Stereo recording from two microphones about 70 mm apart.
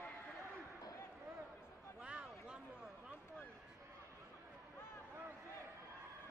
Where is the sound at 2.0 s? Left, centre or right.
Centre.